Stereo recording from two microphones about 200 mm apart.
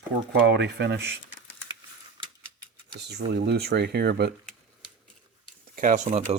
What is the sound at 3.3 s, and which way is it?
Speech, 55° right (ahead or behind).